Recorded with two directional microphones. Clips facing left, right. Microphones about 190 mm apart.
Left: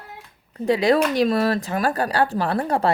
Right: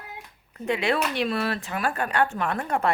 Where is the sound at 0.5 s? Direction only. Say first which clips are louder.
Left 7 dB; 35° left (ahead or behind).